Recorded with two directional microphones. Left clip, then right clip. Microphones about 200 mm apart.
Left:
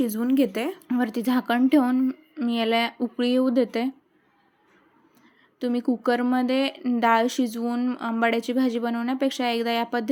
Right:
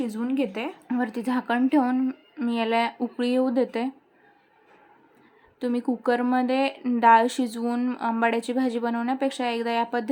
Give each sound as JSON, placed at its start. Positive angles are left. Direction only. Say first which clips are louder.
{"t": 0.0, "sound": "speech", "louder": "left 4 dB", "side_deg": 20}
{"t": 5.5, "sound": "speech", "louder": "left 1 dB", "side_deg": 10}